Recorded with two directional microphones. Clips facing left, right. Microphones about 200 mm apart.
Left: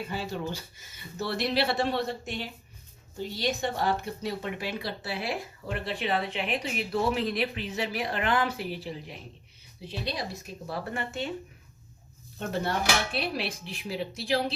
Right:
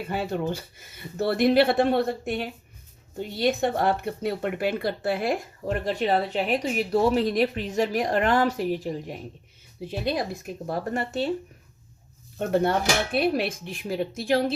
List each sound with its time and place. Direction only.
0.1 s speech: 55° right (ahead or behind); by 11.3 s 35° right (ahead or behind)
12.4 s speech: 55° right (ahead or behind)